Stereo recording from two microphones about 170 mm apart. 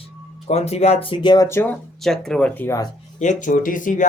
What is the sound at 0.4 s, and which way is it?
Speech, 40° left (ahead or behind).